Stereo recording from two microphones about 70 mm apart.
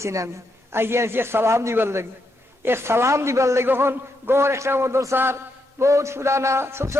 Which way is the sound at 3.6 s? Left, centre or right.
Right.